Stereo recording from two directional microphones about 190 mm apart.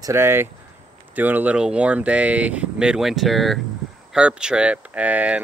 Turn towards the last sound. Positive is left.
turn(degrees=-5)  # may be behind; listen again after turning